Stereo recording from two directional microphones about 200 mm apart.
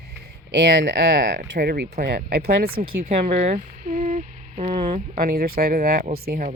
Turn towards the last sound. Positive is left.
turn(degrees=-45)  # may be behind; listen again after turning